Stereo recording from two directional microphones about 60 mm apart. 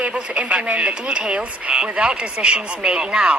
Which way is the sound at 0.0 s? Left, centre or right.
Right.